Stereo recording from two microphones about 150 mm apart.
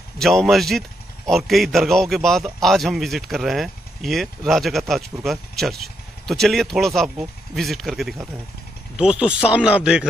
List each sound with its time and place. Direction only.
0.2 s a man's voice: centre (ahead or behind)